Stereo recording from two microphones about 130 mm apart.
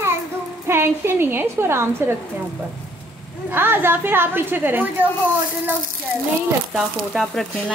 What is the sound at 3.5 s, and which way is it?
A woman's voice, 15° right (ahead or behind).